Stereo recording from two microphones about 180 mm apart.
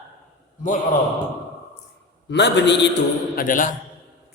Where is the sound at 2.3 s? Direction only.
75° left (ahead or behind).